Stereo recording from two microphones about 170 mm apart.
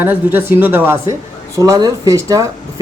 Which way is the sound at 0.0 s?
10° right (ahead or behind).